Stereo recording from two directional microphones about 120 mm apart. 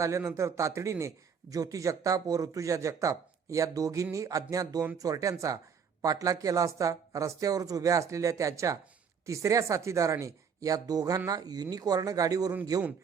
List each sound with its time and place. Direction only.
0.0 s speech: 25° right (ahead or behind)